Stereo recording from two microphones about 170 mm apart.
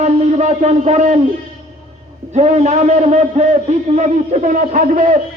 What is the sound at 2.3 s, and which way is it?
A man's voice, 45° right (ahead or behind).